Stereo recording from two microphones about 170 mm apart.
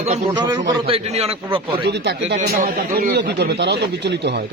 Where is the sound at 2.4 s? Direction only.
65° right (ahead or behind).